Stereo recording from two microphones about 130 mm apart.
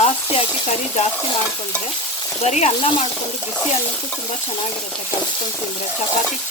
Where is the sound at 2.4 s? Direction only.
60° left (ahead or behind).